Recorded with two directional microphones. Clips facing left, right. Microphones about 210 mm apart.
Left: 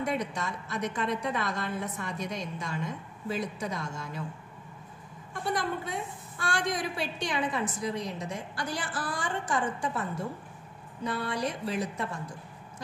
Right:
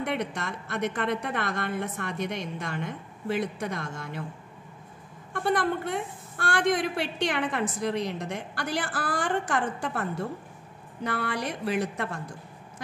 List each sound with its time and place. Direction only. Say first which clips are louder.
0.0 s a woman's voice: right 1 dB; 60° right (ahead or behind)
5.3 s a woman's voice: right 5 dB; 60° right (ahead or behind)
11.1 s a woman's voice: right 1 dB; 65° right (ahead or behind)